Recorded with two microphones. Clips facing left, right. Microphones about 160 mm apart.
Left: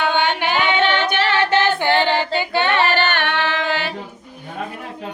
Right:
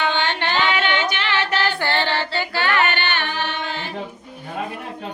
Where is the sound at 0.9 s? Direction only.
55° left (ahead or behind).